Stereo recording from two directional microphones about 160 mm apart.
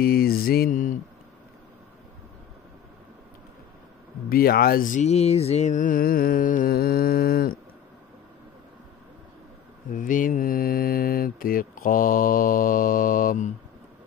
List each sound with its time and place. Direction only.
0.0 s mantra: 70° left (ahead or behind)
4.3 s mantra: 70° left (ahead or behind)
9.9 s mantra: 55° left (ahead or behind)